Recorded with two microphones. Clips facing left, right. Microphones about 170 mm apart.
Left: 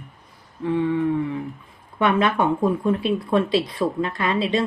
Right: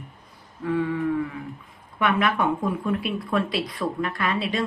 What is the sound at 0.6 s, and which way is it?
Speech, 25° left (ahead or behind).